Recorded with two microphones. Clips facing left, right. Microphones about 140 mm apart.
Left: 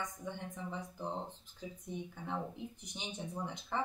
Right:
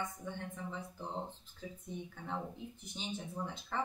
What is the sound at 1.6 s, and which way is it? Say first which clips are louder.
Speech: left 1 dB; 15° left (ahead or behind).